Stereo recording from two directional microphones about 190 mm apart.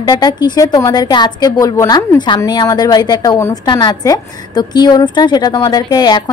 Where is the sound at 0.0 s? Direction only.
20° left (ahead or behind).